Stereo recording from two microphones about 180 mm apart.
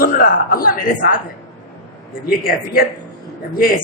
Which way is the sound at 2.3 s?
55° left (ahead or behind).